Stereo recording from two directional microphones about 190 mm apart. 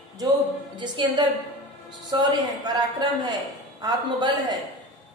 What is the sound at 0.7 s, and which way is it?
Speech, 25° right (ahead or behind).